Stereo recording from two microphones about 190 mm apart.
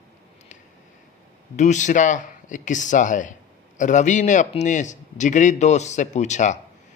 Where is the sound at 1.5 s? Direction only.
40° left (ahead or behind).